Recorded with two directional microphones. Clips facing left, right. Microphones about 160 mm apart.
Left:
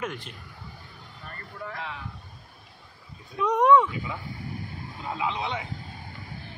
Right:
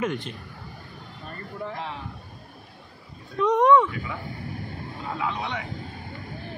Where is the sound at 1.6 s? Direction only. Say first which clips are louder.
Right 3 dB; 30° right (ahead or behind).